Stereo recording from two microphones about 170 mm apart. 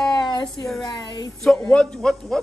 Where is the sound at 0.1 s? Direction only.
25° left (ahead or behind).